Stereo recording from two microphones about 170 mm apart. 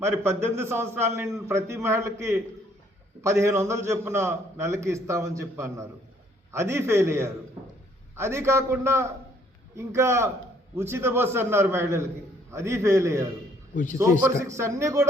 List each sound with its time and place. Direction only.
0.0 s a man's voice: 15° right (ahead or behind)
14.4 s a man's voice: 15° right (ahead or behind)